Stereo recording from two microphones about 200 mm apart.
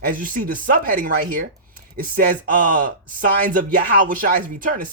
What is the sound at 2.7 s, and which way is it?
A man's voice, 40° right (ahead or behind).